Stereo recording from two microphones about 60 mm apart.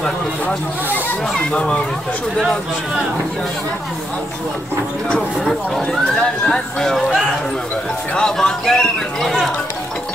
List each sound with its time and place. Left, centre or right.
1.5 s speech: centre
6.0 s speech: centre
8.1 s speech: centre